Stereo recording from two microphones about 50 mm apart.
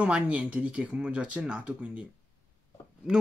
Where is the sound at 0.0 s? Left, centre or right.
Right.